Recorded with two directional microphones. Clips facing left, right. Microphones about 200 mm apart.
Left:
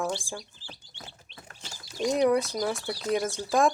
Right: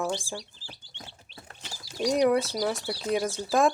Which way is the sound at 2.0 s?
Centre (ahead or behind).